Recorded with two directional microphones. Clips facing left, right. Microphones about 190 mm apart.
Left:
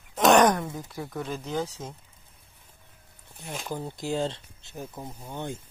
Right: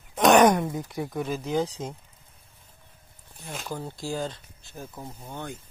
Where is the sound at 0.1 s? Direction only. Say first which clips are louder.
Right 1 dB; centre (ahead or behind).